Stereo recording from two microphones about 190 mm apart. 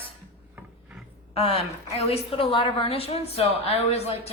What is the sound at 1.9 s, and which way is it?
A woman's voice, 30° left (ahead or behind).